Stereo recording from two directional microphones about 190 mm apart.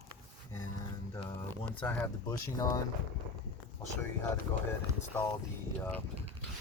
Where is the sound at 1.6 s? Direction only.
5° left (ahead or behind).